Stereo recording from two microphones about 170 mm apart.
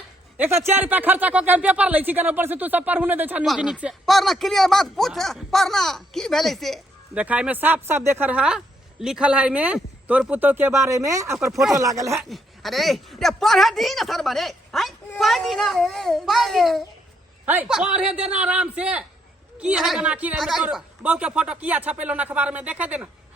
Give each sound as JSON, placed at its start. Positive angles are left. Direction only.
{"t": 0.3, "sound": "speech", "side_deg": -15}
{"t": 11.3, "sound": "speech", "side_deg": 0}
{"t": 11.8, "sound": "speech", "side_deg": -20}
{"t": 12.3, "sound": "speech", "side_deg": 0}
{"t": 17.4, "sound": "speech", "side_deg": -10}